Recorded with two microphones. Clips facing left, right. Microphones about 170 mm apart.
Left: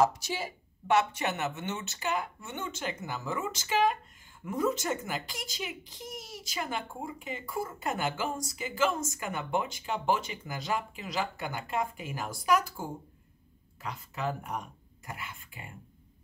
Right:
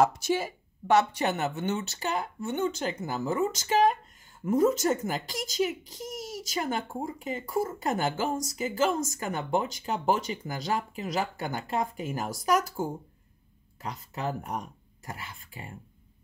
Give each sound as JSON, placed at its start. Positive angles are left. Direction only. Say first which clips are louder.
{"t": 0.0, "sound": "a child's voice", "louder": "right 3 dB", "side_deg": -50}
{"t": 13.8, "sound": "speech", "louder": "right 1 dB", "side_deg": -40}